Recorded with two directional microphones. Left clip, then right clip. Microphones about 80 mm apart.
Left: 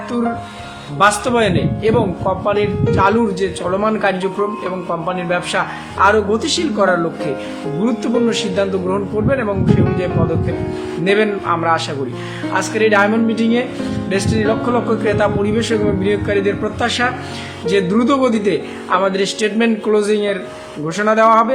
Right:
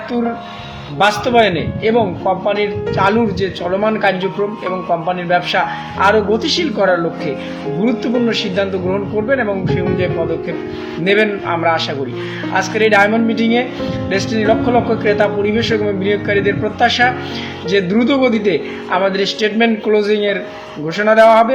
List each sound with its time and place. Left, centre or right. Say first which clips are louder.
0.9 s a man's voice: right 2 dB; left
3.8 s speech: right 2 dB; left
5.3 s a man's voice: right 5 dB; left
11.0 s a man's voice: right 1 dB; left
15.5 s a man's voice: right 1 dB; left
17.9 s speech: right 1 dB; left
18.9 s a man's voice: even; left
19.5 s a man's voice: right 2 dB; left
20.0 s speech: right 1 dB; left